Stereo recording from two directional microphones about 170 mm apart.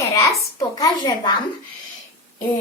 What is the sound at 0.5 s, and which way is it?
Speech, 20° left (ahead or behind).